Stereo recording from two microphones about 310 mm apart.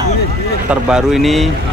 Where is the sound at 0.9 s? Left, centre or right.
Centre.